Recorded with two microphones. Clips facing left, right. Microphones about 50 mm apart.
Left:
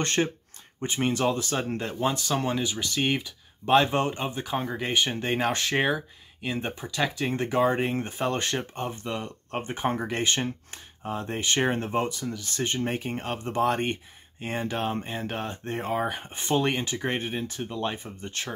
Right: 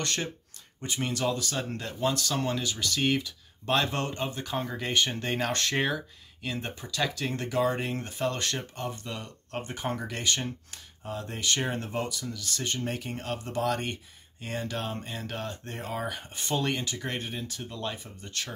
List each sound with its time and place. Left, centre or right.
0.0 s speech: left